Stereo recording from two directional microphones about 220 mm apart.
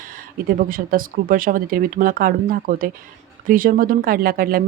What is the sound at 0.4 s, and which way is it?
Speech, 40° right (ahead or behind).